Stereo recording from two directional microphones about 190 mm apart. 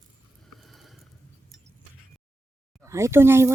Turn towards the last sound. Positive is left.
turn(degrees=-15)  # may be behind; listen again after turning